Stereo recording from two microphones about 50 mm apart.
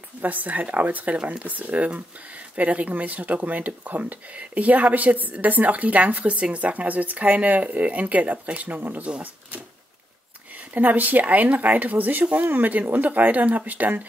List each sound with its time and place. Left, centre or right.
0.2 s speech: right
10.7 s speech: right